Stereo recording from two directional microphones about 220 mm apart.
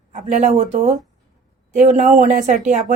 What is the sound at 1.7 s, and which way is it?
Speech, 30° right (ahead or behind).